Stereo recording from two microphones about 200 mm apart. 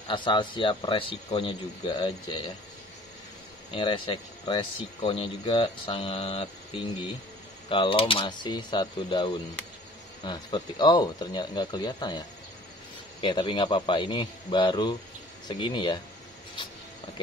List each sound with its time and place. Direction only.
0.1 s speech: 25° left (ahead or behind)
3.7 s speech: 25° left (ahead or behind)
7.7 s speech: 25° left (ahead or behind)